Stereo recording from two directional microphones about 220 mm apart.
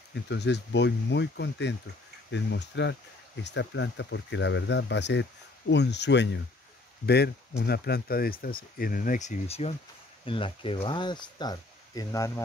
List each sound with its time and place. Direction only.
0.1 s speech: 50° left (ahead or behind); by 12.4 s 15° left (ahead or behind)